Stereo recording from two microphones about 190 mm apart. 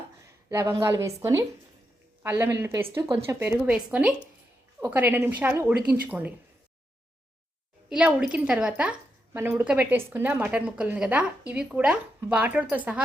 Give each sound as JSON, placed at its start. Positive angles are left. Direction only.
{"t": 0.5, "sound": "a woman's voice", "side_deg": -15}
{"t": 7.9, "sound": "a woman's voice", "side_deg": -5}